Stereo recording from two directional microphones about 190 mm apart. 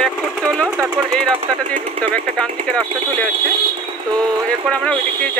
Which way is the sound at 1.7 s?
40° right (ahead or behind).